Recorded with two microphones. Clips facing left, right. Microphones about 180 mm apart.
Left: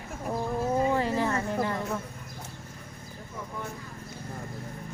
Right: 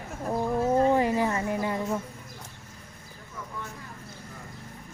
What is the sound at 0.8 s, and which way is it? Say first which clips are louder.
Speech: right 3 dB; 15° right (ahead or behind).